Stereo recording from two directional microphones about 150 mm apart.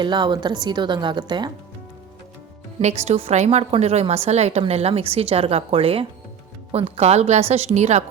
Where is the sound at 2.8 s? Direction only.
45° right (ahead or behind).